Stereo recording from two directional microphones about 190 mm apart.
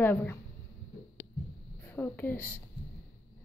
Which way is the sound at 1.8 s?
10° left (ahead or behind).